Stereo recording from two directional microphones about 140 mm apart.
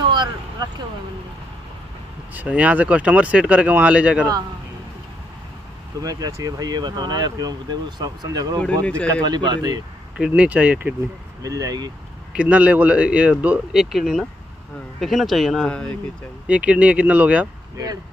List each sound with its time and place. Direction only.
0.1 s vehicle: 30° right (ahead or behind)
2.3 s speech: 10° right (ahead or behind)
5.9 s speech: 25° right (ahead or behind)
8.5 s speech: 10° left (ahead or behind)
9.2 s speech: 30° right (ahead or behind)
10.1 s speech: 5° right (ahead or behind)
11.4 s speech: 25° right (ahead or behind)
12.4 s speech: 10° right (ahead or behind); by 16.0 s 5° left (ahead or behind)
16.4 s speech: 10° right (ahead or behind)